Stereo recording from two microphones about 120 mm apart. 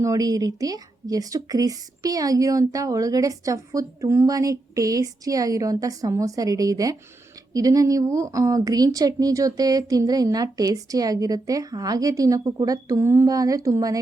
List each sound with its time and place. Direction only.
0.0 s speech: 30° right (ahead or behind)